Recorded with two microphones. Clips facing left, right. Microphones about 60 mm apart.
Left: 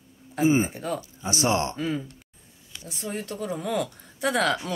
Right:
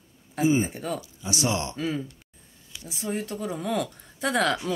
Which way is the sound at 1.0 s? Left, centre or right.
Left.